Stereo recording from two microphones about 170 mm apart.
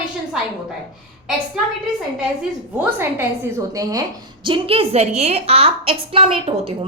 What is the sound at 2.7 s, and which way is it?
A woman's voice, 10° right (ahead or behind).